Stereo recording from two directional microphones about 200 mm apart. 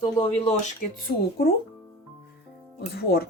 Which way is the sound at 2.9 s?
55° left (ahead or behind).